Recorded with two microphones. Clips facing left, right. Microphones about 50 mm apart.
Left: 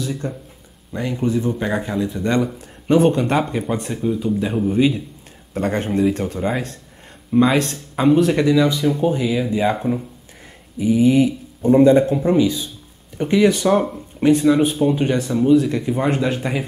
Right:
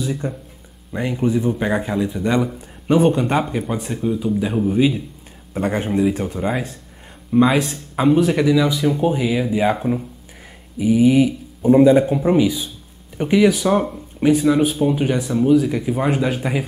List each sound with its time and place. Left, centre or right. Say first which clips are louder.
0.0 s speech: right 1 dB; centre
13.4 s speech: left 1 dB; centre